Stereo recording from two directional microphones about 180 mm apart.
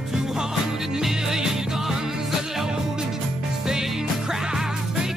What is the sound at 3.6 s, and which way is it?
Music, centre (ahead or behind).